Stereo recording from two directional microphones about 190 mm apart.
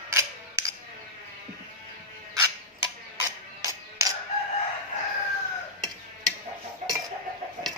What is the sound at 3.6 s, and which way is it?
Music, 15° right (ahead or behind).